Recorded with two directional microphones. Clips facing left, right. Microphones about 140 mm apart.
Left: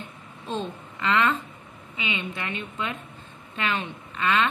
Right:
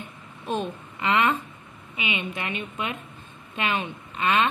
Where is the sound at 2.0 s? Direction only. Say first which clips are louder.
Right 1 dB; 15° right (ahead or behind).